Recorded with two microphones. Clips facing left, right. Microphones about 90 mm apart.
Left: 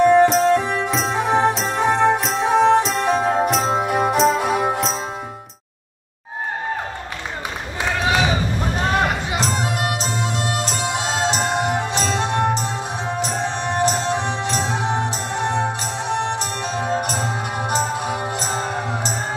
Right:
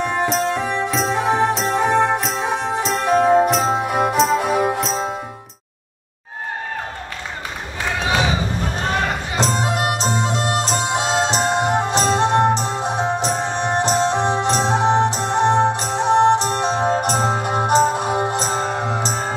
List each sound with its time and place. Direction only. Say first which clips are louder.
0.1 s music: left 6 dB; centre (ahead or behind)
9.4 s music: right 7 dB; 30° right (ahead or behind)